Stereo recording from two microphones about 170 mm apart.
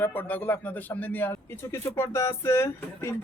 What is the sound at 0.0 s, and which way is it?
A man's voice, 10° left (ahead or behind).